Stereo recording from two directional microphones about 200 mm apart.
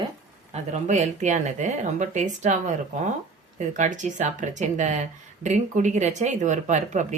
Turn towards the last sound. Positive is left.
turn(degrees=-35)  # may be behind; listen again after turning